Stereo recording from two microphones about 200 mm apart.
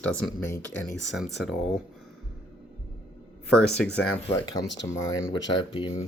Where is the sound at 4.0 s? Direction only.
15° left (ahead or behind).